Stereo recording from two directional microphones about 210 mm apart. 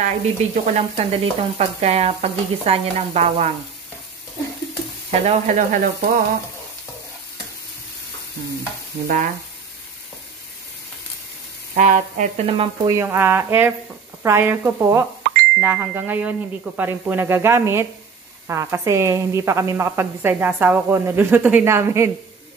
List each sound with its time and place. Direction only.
0.0 s frying: 35° right (ahead or behind)
5.1 s frying: 30° right (ahead or behind)
9.0 s frying: 40° right (ahead or behind)
11.7 s frying: 35° right (ahead or behind)
12.8 s a woman's voice: 15° right (ahead or behind)